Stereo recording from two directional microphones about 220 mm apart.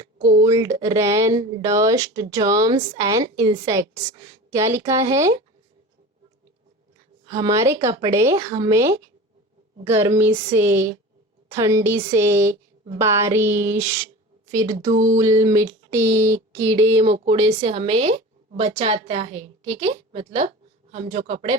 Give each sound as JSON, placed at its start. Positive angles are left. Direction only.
{"t": 0.4, "sound": "speech", "side_deg": -15}
{"t": 7.3, "sound": "speech", "side_deg": -15}
{"t": 14.8, "sound": "a sound", "side_deg": -35}
{"t": 15.2, "sound": "speech", "side_deg": -15}
{"t": 17.0, "sound": "speech", "side_deg": -30}